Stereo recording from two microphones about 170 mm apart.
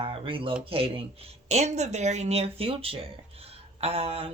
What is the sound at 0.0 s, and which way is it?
Speech, 30° right (ahead or behind).